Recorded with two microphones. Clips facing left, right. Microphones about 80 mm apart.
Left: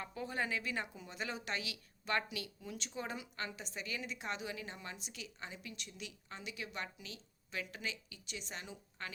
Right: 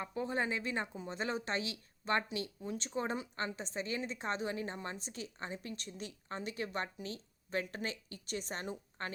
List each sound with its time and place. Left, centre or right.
0.0 s speech: right